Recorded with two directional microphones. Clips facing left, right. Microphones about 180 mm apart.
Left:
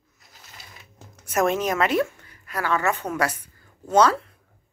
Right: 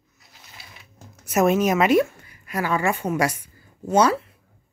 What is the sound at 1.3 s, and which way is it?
A woman's voice, 10° right (ahead or behind).